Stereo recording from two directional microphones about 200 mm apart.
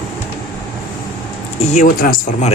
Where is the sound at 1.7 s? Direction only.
40° left (ahead or behind).